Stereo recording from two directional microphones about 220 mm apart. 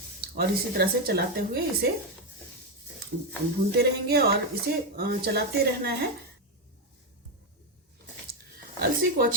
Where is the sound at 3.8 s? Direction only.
45° right (ahead or behind).